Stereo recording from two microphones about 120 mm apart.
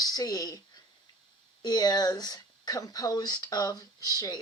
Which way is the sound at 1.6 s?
35° left (ahead or behind).